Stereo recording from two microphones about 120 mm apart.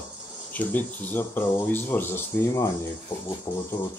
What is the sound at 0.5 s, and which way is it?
Speech, 15° left (ahead or behind).